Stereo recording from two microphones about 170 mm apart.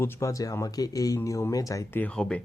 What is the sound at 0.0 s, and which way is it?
A man's voice, 15° left (ahead or behind).